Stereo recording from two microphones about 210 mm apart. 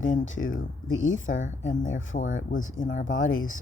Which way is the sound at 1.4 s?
35° left (ahead or behind).